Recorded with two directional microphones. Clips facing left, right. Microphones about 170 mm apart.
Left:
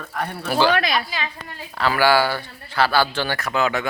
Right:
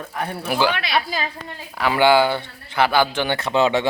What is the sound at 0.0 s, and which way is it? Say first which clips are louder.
Speech: right 1 dB; 5° right (ahead or behind).